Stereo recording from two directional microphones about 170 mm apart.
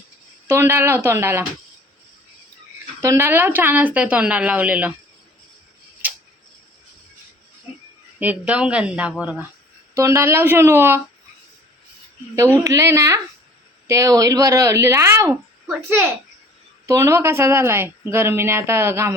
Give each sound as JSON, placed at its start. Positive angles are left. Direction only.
{"t": 0.4, "sound": "speech", "side_deg": -15}
{"t": 3.0, "sound": "speech", "side_deg": -15}
{"t": 6.0, "sound": "tick-tock", "side_deg": -10}
{"t": 8.2, "sound": "speech", "side_deg": -10}
{"t": 12.6, "sound": "speech", "side_deg": -15}
{"t": 16.8, "sound": "speech", "side_deg": -15}